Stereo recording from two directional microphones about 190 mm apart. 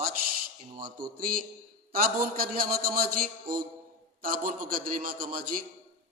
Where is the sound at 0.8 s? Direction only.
50° right (ahead or behind).